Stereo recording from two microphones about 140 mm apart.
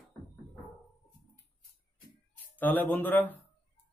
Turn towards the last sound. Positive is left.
turn(degrees=10)  # may be behind; listen again after turning